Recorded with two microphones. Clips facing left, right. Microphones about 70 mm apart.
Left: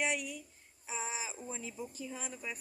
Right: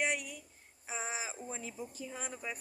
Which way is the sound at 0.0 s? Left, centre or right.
Right.